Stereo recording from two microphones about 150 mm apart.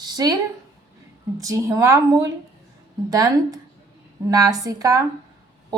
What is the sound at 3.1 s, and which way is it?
A woman's voice, 25° right (ahead or behind).